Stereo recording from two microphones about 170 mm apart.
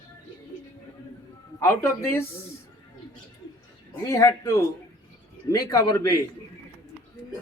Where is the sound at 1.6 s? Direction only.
15° left (ahead or behind).